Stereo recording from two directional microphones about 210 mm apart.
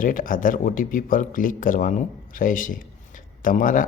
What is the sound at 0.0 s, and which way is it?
Speech, 40° left (ahead or behind).